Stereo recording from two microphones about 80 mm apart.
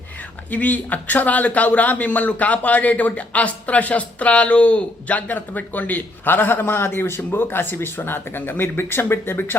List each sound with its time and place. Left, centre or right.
0.5 s speech: centre